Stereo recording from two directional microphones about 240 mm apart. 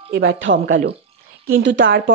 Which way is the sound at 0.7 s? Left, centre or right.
Right.